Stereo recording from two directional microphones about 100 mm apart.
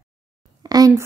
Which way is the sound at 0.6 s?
40° right (ahead or behind).